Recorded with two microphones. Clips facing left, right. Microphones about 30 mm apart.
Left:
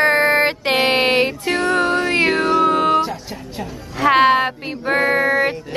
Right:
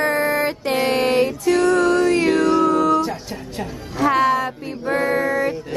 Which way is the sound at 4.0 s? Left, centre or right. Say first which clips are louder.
Left 4 dB; left.